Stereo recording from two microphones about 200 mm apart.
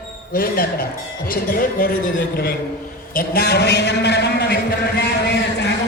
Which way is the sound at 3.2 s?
50° left (ahead or behind).